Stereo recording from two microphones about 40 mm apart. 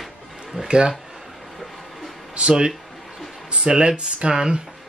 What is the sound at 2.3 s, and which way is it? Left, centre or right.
Speech, right.